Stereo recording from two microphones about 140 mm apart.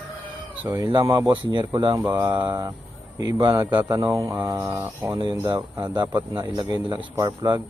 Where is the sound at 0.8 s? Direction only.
30° right (ahead or behind).